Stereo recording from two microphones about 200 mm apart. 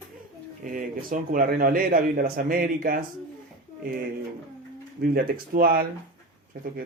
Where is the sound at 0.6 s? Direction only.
40° right (ahead or behind).